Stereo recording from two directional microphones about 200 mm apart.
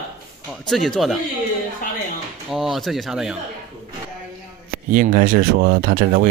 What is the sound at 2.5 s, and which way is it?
Speech, centre (ahead or behind).